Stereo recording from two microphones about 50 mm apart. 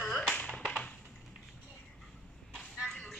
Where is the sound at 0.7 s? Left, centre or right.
Left.